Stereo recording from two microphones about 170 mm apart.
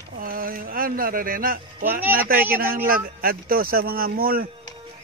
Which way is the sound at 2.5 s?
60° right (ahead or behind).